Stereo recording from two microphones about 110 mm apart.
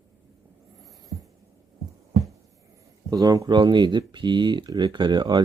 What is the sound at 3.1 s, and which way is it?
Speech, 35° right (ahead or behind).